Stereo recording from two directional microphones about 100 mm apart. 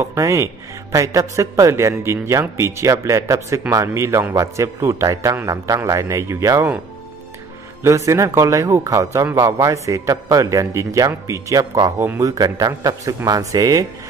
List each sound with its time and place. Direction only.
0.0 s a man's voice: 30° right (ahead or behind)
7.8 s a man's voice: 30° right (ahead or behind)